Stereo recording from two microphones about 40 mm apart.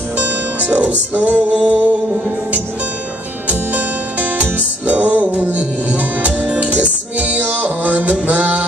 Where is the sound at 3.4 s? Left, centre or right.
Right.